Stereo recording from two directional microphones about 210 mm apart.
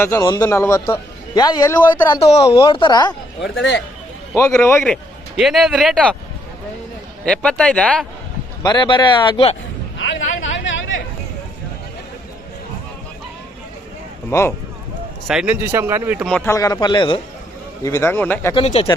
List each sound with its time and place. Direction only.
0.0 s a man's voice: 15° left (ahead or behind)
2.2 s speech: 30° left (ahead or behind)
3.6 s speech: 60° left (ahead or behind)
4.4 s a man's voice: 15° left (ahead or behind)
5.4 s speech: centre (ahead or behind)
7.3 s speech: 5° left (ahead or behind)
8.6 s speech: 20° left (ahead or behind)
10.7 s a sound: 65° left (ahead or behind)
14.3 s a man's voice: 10° left (ahead or behind)
15.3 s speech: 5° right (ahead or behind)
16.2 s a man's voice: 5° left (ahead or behind)
18.5 s speech: 25° left (ahead or behind)